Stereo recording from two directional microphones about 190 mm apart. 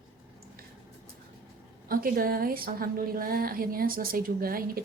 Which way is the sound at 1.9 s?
50° right (ahead or behind).